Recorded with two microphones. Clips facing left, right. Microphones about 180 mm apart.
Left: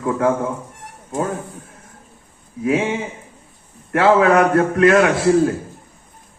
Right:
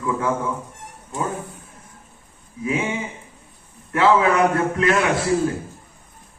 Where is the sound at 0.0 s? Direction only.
55° left (ahead or behind).